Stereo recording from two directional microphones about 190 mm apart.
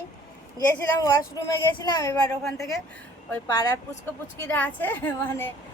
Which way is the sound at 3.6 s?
15° left (ahead or behind).